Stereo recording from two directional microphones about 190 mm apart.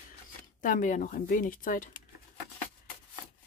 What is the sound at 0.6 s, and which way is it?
Speech, 45° left (ahead or behind).